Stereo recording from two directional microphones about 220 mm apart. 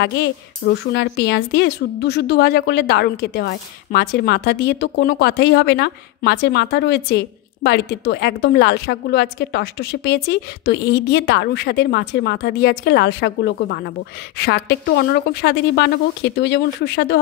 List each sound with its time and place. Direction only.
0.0 s speech: 50° left (ahead or behind)